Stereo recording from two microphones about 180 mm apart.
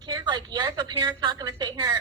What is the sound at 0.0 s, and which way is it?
A woman's voice, 20° right (ahead or behind).